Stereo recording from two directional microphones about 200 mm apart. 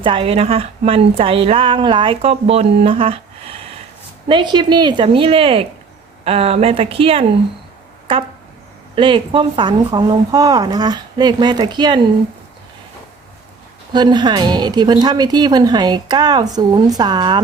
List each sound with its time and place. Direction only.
0.0 s a woman's voice: 25° right (ahead or behind)
4.3 s a woman's voice: 25° right (ahead or behind)
9.0 s a woman's voice: 25° right (ahead or behind)
13.9 s a woman's voice: 20° right (ahead or behind)